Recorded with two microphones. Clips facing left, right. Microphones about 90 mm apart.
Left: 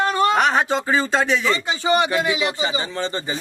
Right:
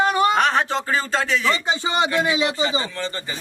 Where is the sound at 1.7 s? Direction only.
20° right (ahead or behind).